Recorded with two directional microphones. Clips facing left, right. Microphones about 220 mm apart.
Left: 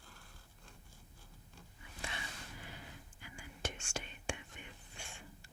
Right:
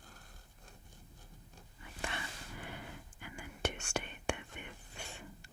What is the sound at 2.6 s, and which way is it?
Whispering, 60° right (ahead or behind).